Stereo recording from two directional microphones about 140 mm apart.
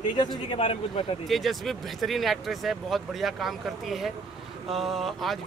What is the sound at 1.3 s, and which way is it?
Speech, centre (ahead or behind).